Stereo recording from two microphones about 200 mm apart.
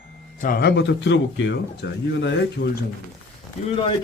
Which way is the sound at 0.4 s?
50° left (ahead or behind).